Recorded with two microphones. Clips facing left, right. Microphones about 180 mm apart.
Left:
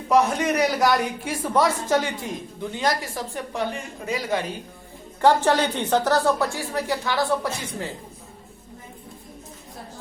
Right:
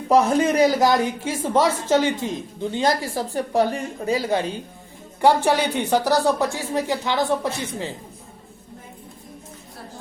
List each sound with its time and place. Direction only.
0.1 s speech: 30° right (ahead or behind)
5.2 s speech: 10° right (ahead or behind)